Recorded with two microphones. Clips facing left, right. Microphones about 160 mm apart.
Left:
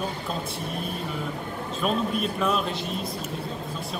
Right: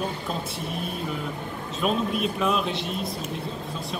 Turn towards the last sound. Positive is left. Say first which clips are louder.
# right 1 dB
turn(degrees=0)  # may be behind; listen again after turning